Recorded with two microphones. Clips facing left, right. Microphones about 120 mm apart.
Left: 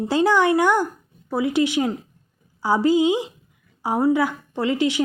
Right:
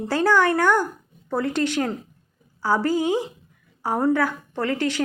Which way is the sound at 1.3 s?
10° left (ahead or behind).